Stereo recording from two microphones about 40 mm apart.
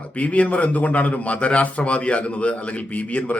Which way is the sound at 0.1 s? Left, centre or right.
Left.